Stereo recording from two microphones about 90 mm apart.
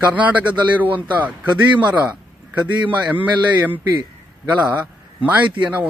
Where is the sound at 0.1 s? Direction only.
15° right (ahead or behind).